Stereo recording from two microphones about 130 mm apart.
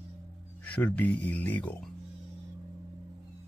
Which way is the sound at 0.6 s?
10° left (ahead or behind).